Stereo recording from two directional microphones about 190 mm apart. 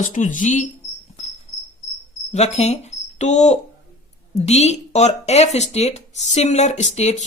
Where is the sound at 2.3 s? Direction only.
35° left (ahead or behind).